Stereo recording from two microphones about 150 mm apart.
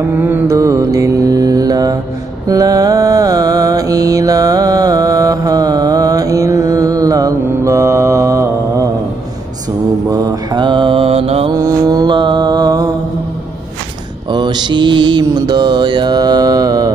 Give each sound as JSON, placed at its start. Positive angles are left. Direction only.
{"t": 0.2, "sound": "mantra", "side_deg": -15}
{"t": 10.0, "sound": "mantra", "side_deg": -25}
{"t": 11.5, "sound": "mantra", "side_deg": -20}
{"t": 14.3, "sound": "mantra", "side_deg": -30}